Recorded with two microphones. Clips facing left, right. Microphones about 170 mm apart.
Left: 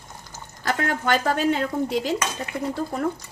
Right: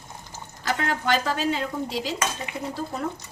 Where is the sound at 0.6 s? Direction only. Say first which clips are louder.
Left 2 dB; 50° left (ahead or behind).